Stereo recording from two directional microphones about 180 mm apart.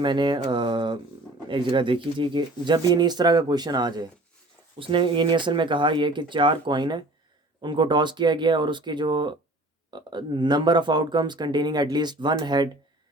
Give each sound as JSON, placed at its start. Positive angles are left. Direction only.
{"t": 0.0, "sound": "speech", "side_deg": -25}